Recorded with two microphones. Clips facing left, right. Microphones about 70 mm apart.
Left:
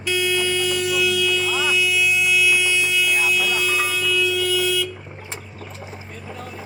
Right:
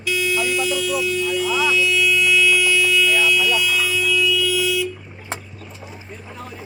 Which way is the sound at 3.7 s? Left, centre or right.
Left.